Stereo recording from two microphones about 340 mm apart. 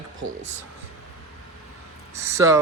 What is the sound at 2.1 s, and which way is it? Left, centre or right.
Speech, centre.